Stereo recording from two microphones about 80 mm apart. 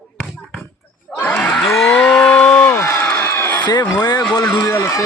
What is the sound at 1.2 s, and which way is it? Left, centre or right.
Crowd, centre.